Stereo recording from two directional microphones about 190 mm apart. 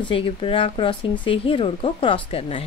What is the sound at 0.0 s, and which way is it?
Speech, 30° left (ahead or behind).